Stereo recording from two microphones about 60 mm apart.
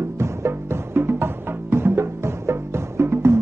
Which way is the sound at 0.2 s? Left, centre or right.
Right.